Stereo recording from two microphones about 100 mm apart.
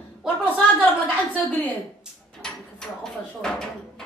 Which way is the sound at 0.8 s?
15° left (ahead or behind).